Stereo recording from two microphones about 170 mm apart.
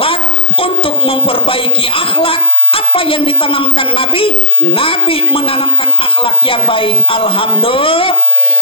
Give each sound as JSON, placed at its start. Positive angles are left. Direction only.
{"t": 0.6, "sound": "speech", "side_deg": 35}